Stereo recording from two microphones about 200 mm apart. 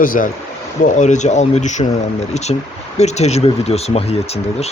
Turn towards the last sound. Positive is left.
turn(degrees=30)  # may be behind; listen again after turning